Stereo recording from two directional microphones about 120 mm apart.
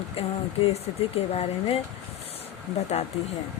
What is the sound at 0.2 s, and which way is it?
Speech, 55° left (ahead or behind).